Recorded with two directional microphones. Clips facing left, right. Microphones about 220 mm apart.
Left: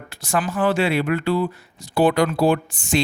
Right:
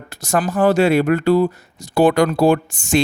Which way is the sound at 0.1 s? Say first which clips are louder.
Right 4 dB; 45° right (ahead or behind).